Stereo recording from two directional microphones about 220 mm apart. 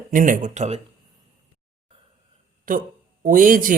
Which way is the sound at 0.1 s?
35° right (ahead or behind).